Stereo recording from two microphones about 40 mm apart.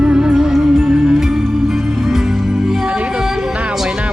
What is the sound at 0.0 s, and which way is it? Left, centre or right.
Music, right.